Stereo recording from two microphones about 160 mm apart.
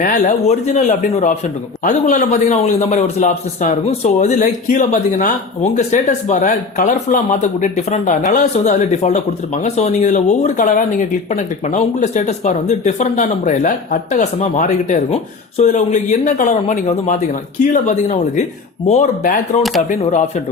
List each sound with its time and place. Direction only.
0.0 s speech: 55° left (ahead or behind)